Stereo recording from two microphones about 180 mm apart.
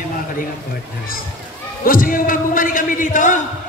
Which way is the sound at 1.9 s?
50° left (ahead or behind).